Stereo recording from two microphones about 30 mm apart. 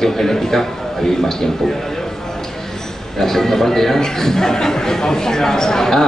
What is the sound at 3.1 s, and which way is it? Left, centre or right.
A man's voice, centre.